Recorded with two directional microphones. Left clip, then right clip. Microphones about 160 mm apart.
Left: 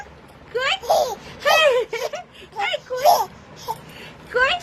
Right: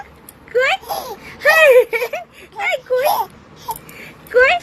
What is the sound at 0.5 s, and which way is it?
Babbling, 30° right (ahead or behind).